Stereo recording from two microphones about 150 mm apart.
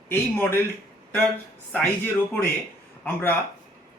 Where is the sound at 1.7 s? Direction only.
10° left (ahead or behind).